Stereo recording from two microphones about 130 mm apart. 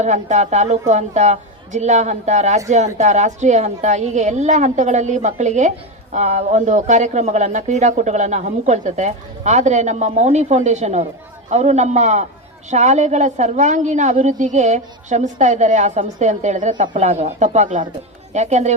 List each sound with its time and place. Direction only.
0.0 s a woman's voice: 65° right (ahead or behind)